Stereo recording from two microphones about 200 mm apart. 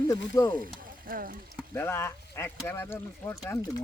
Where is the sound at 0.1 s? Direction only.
15° left (ahead or behind).